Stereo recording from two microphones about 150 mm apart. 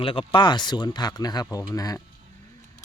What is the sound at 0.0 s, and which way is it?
Speech, 35° left (ahead or behind).